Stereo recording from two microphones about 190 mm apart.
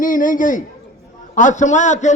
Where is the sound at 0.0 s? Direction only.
45° left (ahead or behind).